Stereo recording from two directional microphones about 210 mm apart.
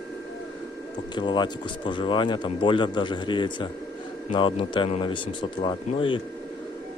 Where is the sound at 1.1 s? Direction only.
20° left (ahead or behind).